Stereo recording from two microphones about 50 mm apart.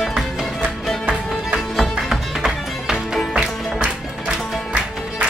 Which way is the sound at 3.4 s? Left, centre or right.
Centre.